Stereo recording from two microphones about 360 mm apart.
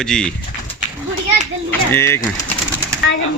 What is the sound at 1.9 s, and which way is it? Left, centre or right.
Speech, centre.